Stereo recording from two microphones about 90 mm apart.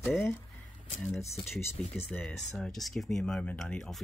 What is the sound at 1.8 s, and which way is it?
Speech, 15° left (ahead or behind).